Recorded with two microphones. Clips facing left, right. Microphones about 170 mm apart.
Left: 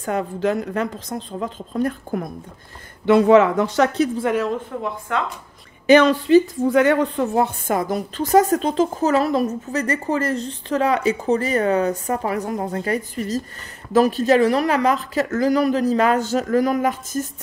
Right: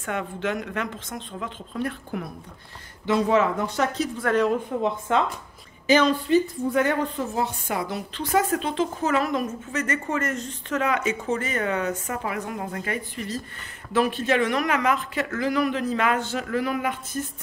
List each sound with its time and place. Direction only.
0.0 s a woman's voice: 35° left (ahead or behind)
3.1 s a woman's voice: 65° left (ahead or behind)
4.8 s speech: 20° right (ahead or behind)
5.9 s a woman's voice: 70° left (ahead or behind)
7.6 s a woman's voice: 45° left (ahead or behind)